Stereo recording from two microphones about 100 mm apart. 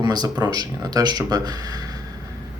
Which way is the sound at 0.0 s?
40° right (ahead or behind).